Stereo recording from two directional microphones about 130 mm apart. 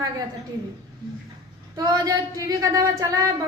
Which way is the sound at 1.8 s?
25° right (ahead or behind).